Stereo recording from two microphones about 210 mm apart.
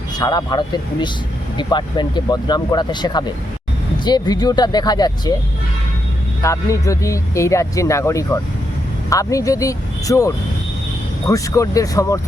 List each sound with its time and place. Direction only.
0.2 s speech: 20° left (ahead or behind)
6.4 s speech: 15° left (ahead or behind)